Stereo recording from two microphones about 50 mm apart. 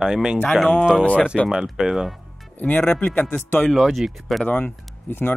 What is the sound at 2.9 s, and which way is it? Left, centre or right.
Speech, left.